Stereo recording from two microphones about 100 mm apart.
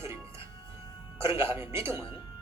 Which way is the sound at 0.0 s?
25° right (ahead or behind).